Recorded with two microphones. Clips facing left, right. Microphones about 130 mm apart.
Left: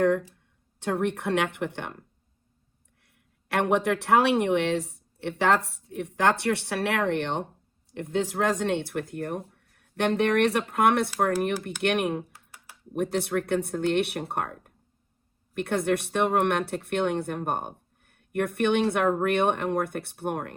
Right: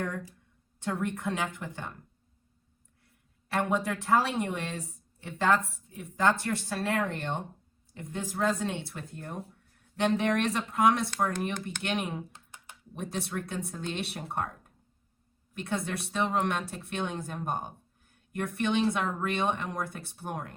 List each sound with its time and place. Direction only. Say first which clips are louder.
0.8 s speech: left 5 dB; 70° left (ahead or behind)
3.5 s speech: left 5 dB; 70° left (ahead or behind)
12.3 s computer keyboard: even; 20° right (ahead or behind)
13.0 s speech: left 8 dB; 65° left (ahead or behind)